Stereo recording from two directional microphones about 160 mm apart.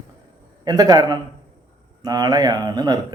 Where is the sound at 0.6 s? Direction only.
25° right (ahead or behind).